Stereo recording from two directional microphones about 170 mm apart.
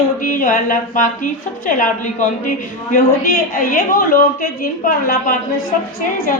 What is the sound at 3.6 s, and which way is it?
A woman's voice, 55° left (ahead or behind).